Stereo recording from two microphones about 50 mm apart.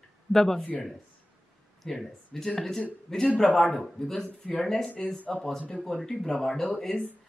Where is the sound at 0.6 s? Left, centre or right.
Left.